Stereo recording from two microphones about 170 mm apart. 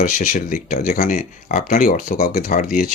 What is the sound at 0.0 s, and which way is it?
Speech, 50° left (ahead or behind).